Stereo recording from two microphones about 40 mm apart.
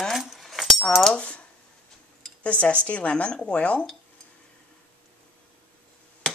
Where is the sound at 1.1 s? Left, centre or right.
Left.